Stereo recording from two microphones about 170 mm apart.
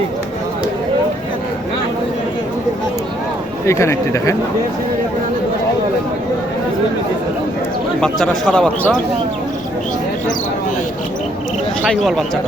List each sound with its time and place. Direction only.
3.7 s speech: 15° left (ahead or behind)
8.0 s a man's voice: 5° left (ahead or behind)
11.9 s a man's voice: centre (ahead or behind)